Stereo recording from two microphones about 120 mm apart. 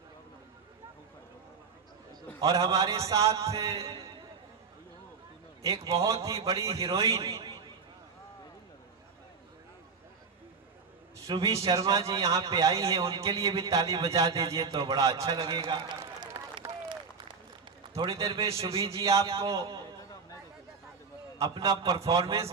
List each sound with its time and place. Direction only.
2.4 s a man's voice: 30° right (ahead or behind)
5.6 s a man's voice: 25° right (ahead or behind)
11.3 s a man's voice: 45° right (ahead or behind)
11.7 s a man's voice: 30° right (ahead or behind)
16.6 s run: 40° right (ahead or behind)
17.8 s a man's voice: 40° right (ahead or behind)
19.5 s a man's voice: 50° right (ahead or behind)
21.3 s a man's voice: 30° right (ahead or behind)